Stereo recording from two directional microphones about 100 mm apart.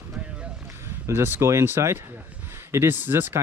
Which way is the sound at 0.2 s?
10° right (ahead or behind).